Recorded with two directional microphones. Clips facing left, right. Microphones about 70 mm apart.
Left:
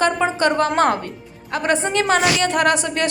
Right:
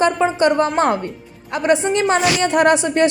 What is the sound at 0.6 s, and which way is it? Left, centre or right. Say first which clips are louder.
Speech: even; left.